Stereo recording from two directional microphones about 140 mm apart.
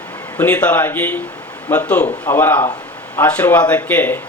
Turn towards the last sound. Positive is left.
turn(degrees=15)  # may be behind; listen again after turning